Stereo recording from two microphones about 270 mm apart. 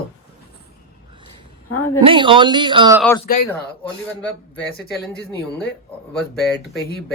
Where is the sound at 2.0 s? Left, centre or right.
Centre.